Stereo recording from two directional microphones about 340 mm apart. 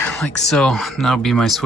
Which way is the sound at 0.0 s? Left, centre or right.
Centre.